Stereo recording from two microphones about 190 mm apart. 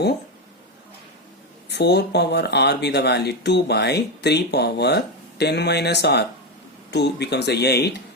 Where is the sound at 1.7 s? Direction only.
60° left (ahead or behind).